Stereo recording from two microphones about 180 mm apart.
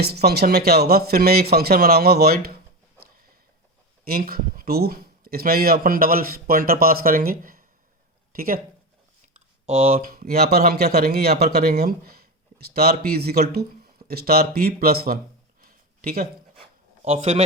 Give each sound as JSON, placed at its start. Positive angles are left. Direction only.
{"t": 0.0, "sound": "speech", "side_deg": -60}
{"t": 4.0, "sound": "speech", "side_deg": -55}
{"t": 9.6, "sound": "speech", "side_deg": -35}
{"t": 10.1, "sound": "speech", "side_deg": -55}
{"t": 15.6, "sound": "a sound", "side_deg": -55}
{"t": 17.0, "sound": "a man's voice", "side_deg": -35}